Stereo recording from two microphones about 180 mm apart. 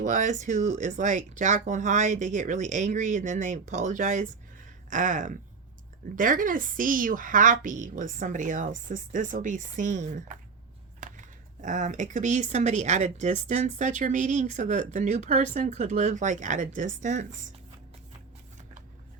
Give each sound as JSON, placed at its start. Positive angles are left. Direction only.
{"t": 0.0, "sound": "speech", "side_deg": -45}